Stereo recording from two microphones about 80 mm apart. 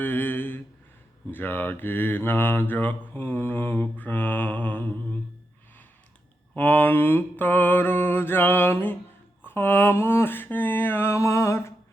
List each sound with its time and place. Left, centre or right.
0.0 s a sound: left
1.3 s mantra: left
6.5 s mantra: left